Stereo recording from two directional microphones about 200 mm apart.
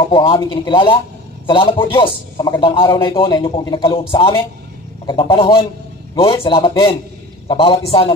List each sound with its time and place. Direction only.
0.1 s a man's voice: 25° left (ahead or behind)
5.0 s a man's voice: 25° left (ahead or behind)